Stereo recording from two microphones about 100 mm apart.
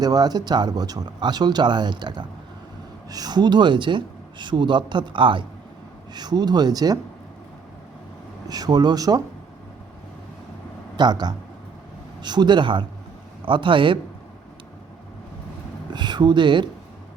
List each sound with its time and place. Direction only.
0.0 s speech: 40° right (ahead or behind)
6.1 s speech: 45° right (ahead or behind)
8.4 s speech: 40° right (ahead or behind)
10.9 s a man's voice: 45° right (ahead or behind)
15.9 s speech: 45° right (ahead or behind)